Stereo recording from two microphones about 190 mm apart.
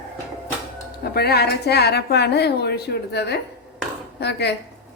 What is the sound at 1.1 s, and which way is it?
A woman's voice, 55° left (ahead or behind).